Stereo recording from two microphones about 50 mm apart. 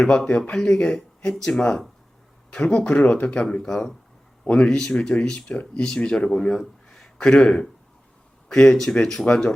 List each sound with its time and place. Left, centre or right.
0.3 s speech: left
3.4 s a man's voice: centre